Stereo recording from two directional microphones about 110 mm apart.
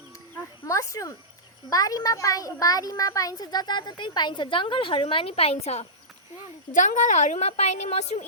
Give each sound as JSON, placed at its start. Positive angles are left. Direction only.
{"t": 0.7, "sound": "speech", "side_deg": 30}
{"t": 7.1, "sound": "a woman's voice", "side_deg": 90}